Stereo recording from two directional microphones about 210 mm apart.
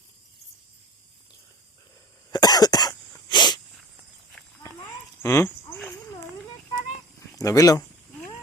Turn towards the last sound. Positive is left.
turn(degrees=15)  # may be behind; listen again after turning